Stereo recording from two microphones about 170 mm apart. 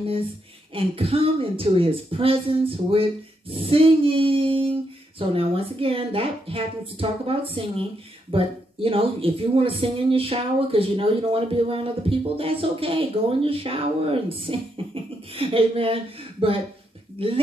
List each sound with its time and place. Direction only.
0.7 s speech: 35° right (ahead or behind)